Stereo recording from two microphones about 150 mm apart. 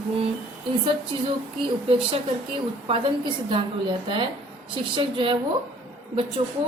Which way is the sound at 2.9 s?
35° right (ahead or behind).